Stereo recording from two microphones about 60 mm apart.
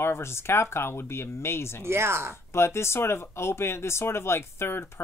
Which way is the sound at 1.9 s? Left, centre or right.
Right.